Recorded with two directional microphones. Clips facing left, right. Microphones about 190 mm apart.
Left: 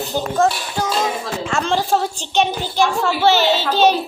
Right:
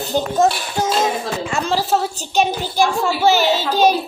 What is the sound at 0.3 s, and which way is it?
Child singing, 20° right (ahead or behind).